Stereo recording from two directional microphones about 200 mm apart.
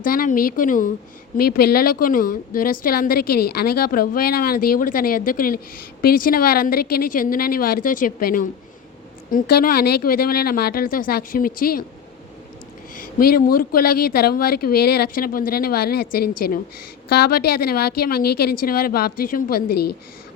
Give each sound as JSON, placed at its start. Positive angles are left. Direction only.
{"t": 0.0, "sound": "a woman's voice", "side_deg": 45}
{"t": 13.0, "sound": "a woman's voice", "side_deg": 45}